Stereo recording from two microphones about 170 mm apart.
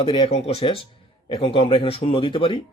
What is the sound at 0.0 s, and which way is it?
Speech, 30° left (ahead or behind).